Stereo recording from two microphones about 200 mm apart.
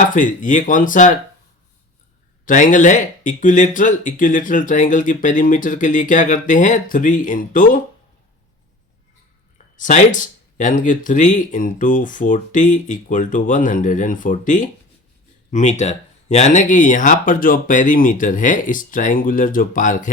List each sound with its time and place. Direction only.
0.0 s speech: 40° left (ahead or behind)
2.4 s speech: 40° left (ahead or behind)
9.7 s speech: 40° left (ahead or behind)